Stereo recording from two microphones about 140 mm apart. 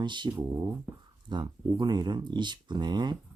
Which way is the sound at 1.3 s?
30° right (ahead or behind).